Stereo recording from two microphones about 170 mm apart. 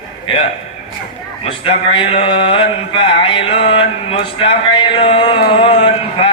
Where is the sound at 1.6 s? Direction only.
35° left (ahead or behind).